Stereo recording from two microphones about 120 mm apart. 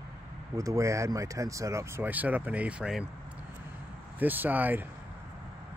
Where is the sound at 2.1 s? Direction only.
15° right (ahead or behind).